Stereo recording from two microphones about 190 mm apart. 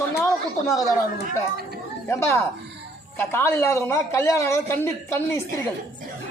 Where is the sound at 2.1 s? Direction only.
15° left (ahead or behind).